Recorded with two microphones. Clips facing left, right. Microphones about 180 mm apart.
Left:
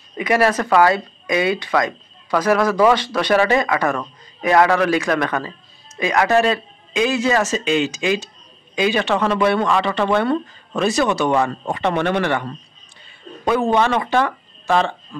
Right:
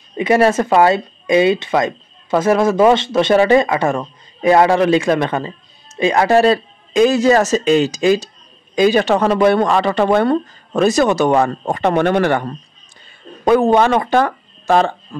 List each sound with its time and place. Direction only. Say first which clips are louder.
0.2 s speech: right 4 dB; 25° right (ahead or behind); by 15.0 s 40° right (ahead or behind)